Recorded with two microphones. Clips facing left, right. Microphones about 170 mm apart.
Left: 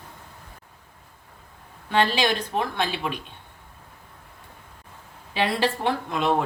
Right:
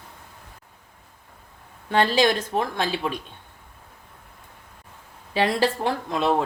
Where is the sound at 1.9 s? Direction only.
45° right (ahead or behind).